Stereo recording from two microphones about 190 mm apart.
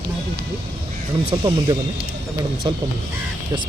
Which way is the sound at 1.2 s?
25° right (ahead or behind).